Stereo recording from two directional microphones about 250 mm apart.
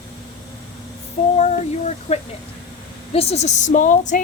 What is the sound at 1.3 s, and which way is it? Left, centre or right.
A woman's voice, left.